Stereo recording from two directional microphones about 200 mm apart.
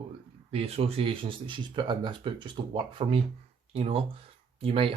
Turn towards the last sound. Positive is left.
turn(degrees=-30)  # may be behind; listen again after turning